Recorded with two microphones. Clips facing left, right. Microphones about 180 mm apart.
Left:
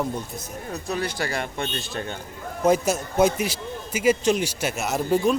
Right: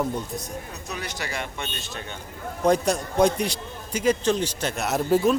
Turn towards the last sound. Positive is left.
turn(degrees=0)  # may be behind; listen again after turning